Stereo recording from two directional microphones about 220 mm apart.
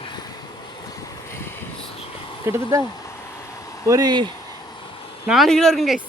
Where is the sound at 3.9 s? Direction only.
20° right (ahead or behind).